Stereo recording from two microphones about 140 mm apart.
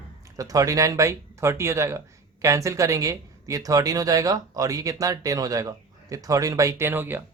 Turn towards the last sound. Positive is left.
turn(degrees=-15)  # may be behind; listen again after turning